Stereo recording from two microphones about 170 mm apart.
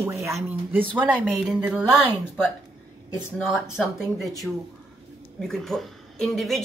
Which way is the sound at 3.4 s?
Centre (ahead or behind).